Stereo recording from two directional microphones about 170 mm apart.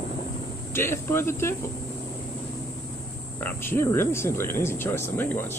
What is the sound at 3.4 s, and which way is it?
Speech, 15° left (ahead or behind).